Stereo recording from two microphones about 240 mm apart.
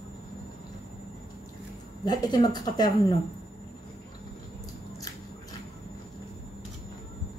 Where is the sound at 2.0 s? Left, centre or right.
Centre.